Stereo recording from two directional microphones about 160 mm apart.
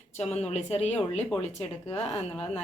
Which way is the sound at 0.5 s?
40° left (ahead or behind).